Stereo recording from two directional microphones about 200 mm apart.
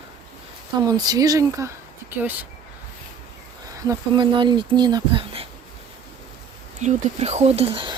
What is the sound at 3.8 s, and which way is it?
Speech, 20° right (ahead or behind).